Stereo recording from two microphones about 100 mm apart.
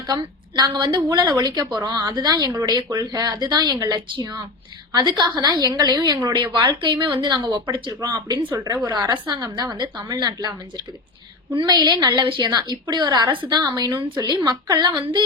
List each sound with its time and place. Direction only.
0.1 s a woman's voice: 40° right (ahead or behind)
2.6 s a woman's voice: 50° right (ahead or behind)
13.6 s a woman's voice: 40° right (ahead or behind)